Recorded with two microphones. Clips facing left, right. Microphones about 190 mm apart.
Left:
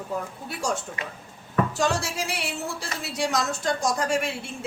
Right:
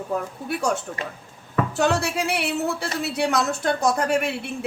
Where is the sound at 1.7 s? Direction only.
60° right (ahead or behind).